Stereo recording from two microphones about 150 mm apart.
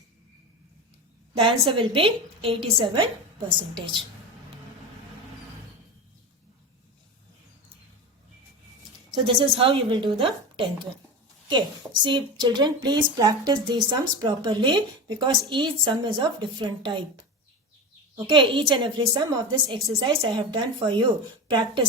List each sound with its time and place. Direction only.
1.4 s a woman's voice: 35° right (ahead or behind)
9.1 s a woman's voice: 35° right (ahead or behind)
12.0 s a woman's voice: 30° right (ahead or behind)
18.3 s a woman's voice: 35° right (ahead or behind)